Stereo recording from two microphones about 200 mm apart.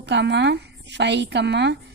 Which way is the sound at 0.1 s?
60° right (ahead or behind).